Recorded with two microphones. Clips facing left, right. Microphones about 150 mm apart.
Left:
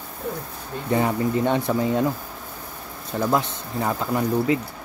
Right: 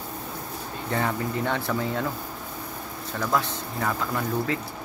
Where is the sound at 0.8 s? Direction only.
20° left (ahead or behind).